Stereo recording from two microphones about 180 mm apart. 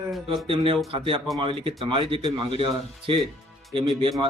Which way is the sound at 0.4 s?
30° right (ahead or behind).